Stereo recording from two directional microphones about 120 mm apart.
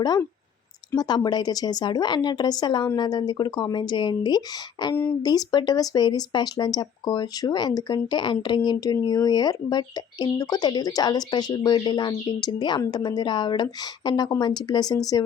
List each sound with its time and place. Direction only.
0.9 s speech: 35° left (ahead or behind)